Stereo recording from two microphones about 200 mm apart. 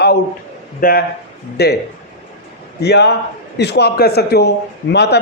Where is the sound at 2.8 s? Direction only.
55° left (ahead or behind).